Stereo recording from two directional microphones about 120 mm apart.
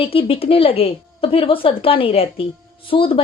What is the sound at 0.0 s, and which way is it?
A woman's voice, 50° left (ahead or behind).